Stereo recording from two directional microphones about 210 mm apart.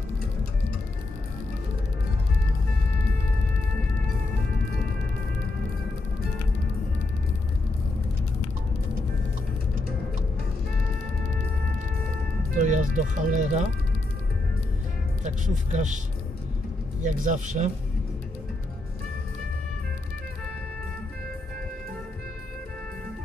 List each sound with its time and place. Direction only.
12.5 s speech: 35° right (ahead or behind)
15.2 s speech: 35° right (ahead or behind)
17.0 s speech: 35° right (ahead or behind)